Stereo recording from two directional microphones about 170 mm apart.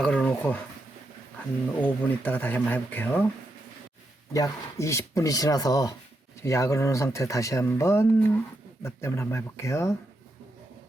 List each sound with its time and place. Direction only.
0.0 s a sound: 5° left (ahead or behind)
1.8 s speech: 10° left (ahead or behind)
4.4 s speech: 15° left (ahead or behind)